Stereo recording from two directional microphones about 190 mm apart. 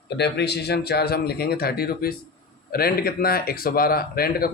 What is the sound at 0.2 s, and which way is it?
Speech, 60° left (ahead or behind).